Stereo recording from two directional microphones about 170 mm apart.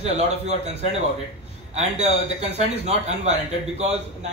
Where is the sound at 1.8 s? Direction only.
40° right (ahead or behind).